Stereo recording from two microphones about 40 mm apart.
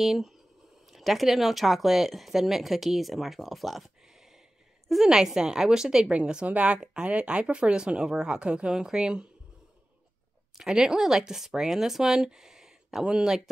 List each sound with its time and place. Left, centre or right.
0.0 s speech: centre
4.1 s a sound: centre
4.8 s speech: centre
6.4 s speech: right
10.5 s speech: centre